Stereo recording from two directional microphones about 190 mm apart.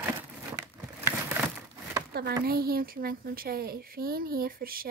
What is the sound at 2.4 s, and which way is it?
Speech, 50° right (ahead or behind).